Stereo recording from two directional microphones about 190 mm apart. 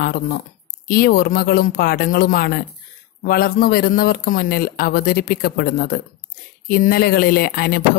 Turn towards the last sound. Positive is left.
turn(degrees=50)  # may be behind; listen again after turning